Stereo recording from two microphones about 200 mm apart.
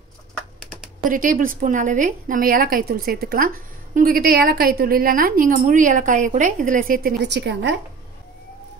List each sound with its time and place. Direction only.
1.0 s a woman's voice: 45° right (ahead or behind); by 7.7 s 60° right (ahead or behind)